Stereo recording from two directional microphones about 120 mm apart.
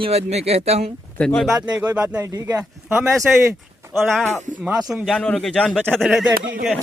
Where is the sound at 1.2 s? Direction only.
5° left (ahead or behind).